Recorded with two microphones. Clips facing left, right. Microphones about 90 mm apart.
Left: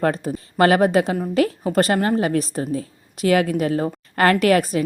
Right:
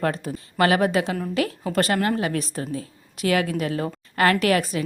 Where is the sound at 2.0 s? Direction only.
30° left (ahead or behind).